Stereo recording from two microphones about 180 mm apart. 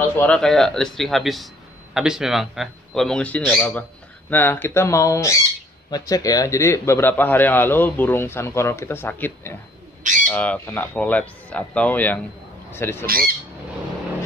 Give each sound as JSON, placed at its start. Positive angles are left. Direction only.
{"t": 0.2, "sound": "a man's voice", "side_deg": 5}
{"t": 13.0, "sound": "speech", "side_deg": -55}